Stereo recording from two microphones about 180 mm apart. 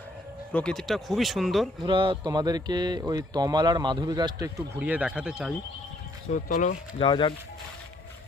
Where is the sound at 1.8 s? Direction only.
25° right (ahead or behind); by 5.5 s 5° right (ahead or behind).